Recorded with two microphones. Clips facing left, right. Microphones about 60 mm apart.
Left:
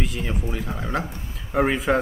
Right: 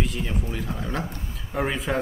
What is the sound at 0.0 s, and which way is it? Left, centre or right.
A man's voice, centre.